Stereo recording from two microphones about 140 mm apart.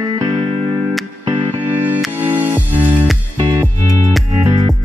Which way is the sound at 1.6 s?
10° right (ahead or behind).